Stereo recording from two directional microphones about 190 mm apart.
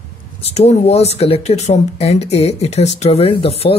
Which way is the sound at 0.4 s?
35° left (ahead or behind).